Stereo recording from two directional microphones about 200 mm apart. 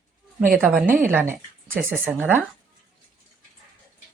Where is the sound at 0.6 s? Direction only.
5° right (ahead or behind).